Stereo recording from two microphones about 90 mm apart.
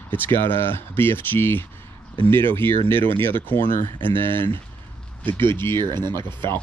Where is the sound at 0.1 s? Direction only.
25° left (ahead or behind).